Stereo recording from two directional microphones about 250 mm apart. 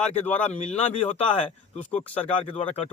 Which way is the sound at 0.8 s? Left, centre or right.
Left.